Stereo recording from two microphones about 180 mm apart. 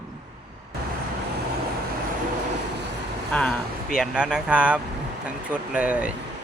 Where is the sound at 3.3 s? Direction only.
5° left (ahead or behind).